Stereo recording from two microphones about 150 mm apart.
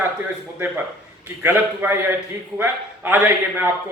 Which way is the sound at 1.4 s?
15° right (ahead or behind).